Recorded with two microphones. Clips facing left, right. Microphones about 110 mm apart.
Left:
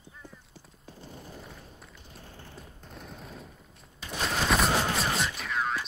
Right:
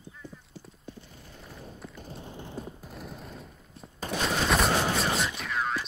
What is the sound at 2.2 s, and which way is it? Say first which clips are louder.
Mechanisms: right 8 dB; 20° right (ahead or behind).